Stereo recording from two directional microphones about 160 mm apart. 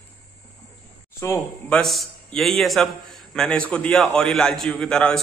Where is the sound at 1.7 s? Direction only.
Centre (ahead or behind).